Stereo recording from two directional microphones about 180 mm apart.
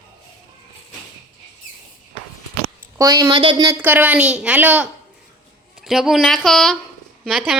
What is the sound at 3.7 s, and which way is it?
A woman's voice, 10° right (ahead or behind).